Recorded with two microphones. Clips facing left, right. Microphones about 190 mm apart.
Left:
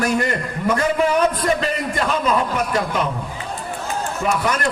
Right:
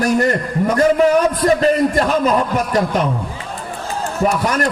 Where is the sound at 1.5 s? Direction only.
40° right (ahead or behind).